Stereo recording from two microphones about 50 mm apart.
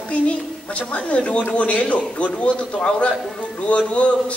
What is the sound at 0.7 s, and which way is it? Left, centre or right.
A man's voice, left.